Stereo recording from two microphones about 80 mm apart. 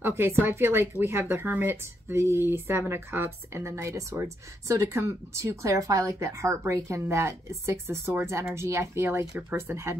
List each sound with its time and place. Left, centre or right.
0.2 s speech: right